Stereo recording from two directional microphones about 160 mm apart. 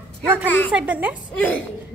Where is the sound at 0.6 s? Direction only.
10° right (ahead or behind).